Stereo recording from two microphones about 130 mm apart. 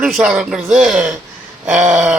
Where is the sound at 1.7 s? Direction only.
65° right (ahead or behind).